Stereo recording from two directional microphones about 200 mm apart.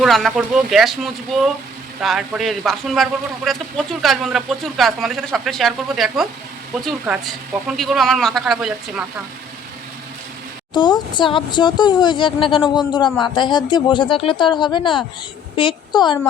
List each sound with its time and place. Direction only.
0.0 s speech: centre (ahead or behind)
10.8 s a woman's voice: 20° left (ahead or behind)